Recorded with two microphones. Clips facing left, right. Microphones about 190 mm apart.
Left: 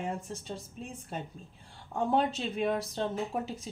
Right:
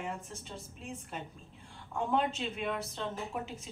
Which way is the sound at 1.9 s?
35° left (ahead or behind).